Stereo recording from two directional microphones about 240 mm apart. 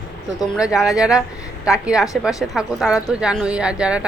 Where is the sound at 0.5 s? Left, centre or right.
Centre.